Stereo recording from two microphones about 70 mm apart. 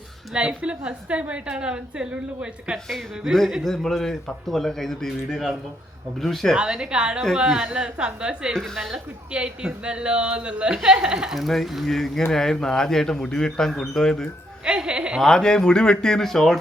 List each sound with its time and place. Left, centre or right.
0.3 s a woman's voice: centre
2.7 s speech: centre
6.6 s a woman's voice: centre
8.5 s speech: centre
9.3 s a woman's voice: centre
11.3 s speech: centre
14.6 s a woman's voice: centre
15.2 s speech: centre